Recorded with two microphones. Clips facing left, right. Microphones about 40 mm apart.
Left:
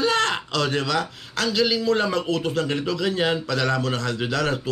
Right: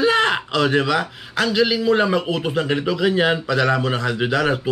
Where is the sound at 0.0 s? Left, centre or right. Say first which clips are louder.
Right 4 dB; centre.